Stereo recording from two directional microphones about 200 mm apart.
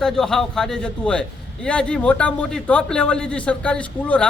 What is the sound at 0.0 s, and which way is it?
Speech, centre (ahead or behind).